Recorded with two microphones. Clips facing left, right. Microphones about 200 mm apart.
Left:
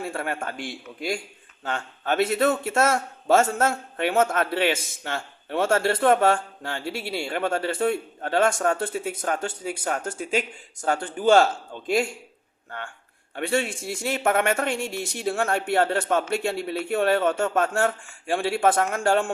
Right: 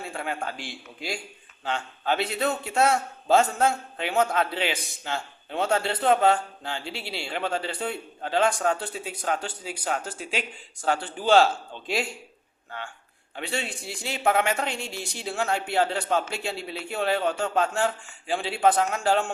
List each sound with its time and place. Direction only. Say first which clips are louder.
0.0 s a man's voice: left 3 dB; 55° left (ahead or behind)
13.3 s a man's voice: left 7 dB; 55° left (ahead or behind)